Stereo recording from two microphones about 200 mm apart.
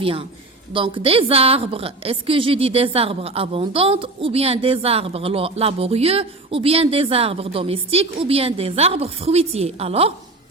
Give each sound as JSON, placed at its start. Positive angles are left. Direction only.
{"t": 0.0, "sound": "a woman's voice", "side_deg": -25}